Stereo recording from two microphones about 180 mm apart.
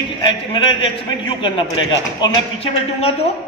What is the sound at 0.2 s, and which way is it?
A man's voice, 25° left (ahead or behind).